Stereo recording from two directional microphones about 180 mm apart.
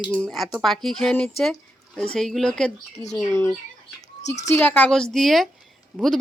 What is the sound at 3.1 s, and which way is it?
Speech, 15° left (ahead or behind).